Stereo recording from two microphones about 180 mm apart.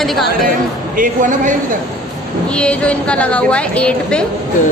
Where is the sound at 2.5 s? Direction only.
5° left (ahead or behind).